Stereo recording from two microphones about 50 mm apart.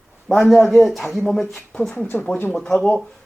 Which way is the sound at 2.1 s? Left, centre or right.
Left.